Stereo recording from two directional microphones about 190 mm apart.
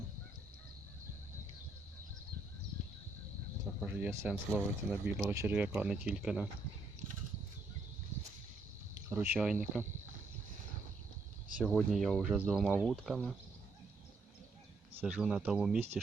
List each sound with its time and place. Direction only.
3.8 s speech: 10° right (ahead or behind)
9.0 s speech: 10° right (ahead or behind)
11.5 s speech: 5° left (ahead or behind)
15.0 s speech: 5° right (ahead or behind)